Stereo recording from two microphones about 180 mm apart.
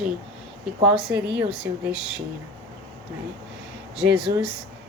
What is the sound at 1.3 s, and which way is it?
Speech, 5° right (ahead or behind).